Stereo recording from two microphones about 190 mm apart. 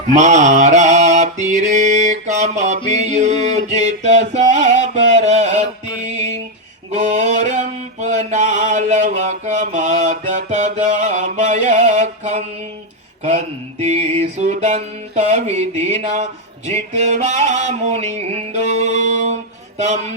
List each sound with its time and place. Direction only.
0.1 s mantra: 40° right (ahead or behind)
6.9 s mantra: 35° right (ahead or behind)
13.2 s music: 35° right (ahead or behind)